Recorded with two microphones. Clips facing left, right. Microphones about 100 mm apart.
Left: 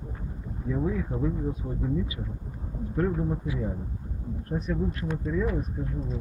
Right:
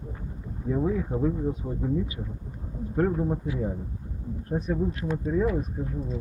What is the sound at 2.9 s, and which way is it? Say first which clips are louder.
Speech: right 2 dB; 35° right (ahead or behind).